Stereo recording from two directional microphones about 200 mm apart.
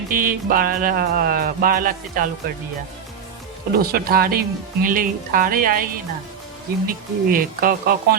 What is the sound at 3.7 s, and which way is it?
Speech, 50° right (ahead or behind).